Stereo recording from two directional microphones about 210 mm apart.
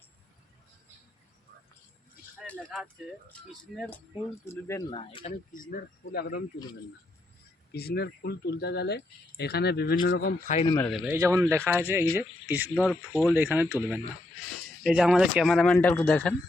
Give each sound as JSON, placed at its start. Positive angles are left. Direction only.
{"t": 2.4, "sound": "a sound", "side_deg": 0}
{"t": 3.8, "sound": "speech", "side_deg": 10}
{"t": 4.9, "sound": "speech", "side_deg": 25}
{"t": 5.5, "sound": "speech", "side_deg": 45}
{"t": 7.7, "sound": "speech", "side_deg": 50}
{"t": 10.8, "sound": "speech", "side_deg": 0}
{"t": 11.1, "sound": "speech", "side_deg": -15}
{"t": 12.9, "sound": "speech", "side_deg": 5}
{"t": 13.3, "sound": "speech", "side_deg": -10}
{"t": 14.8, "sound": "speech", "side_deg": -5}